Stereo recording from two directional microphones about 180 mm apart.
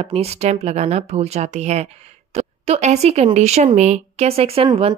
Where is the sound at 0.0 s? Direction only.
35° right (ahead or behind).